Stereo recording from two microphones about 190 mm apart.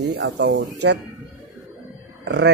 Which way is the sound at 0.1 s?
65° right (ahead or behind).